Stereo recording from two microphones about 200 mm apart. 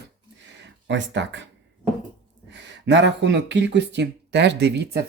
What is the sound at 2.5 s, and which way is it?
Speech, 65° right (ahead or behind).